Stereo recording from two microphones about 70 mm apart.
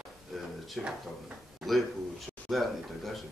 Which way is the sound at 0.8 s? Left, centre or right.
Centre.